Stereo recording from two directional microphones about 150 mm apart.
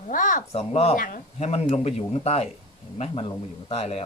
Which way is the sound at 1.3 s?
45° left (ahead or behind).